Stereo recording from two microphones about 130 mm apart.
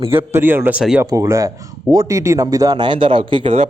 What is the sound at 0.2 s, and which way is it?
Speech, 15° right (ahead or behind).